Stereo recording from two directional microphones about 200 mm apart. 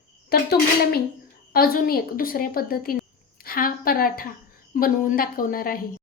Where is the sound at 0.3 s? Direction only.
55° left (ahead or behind).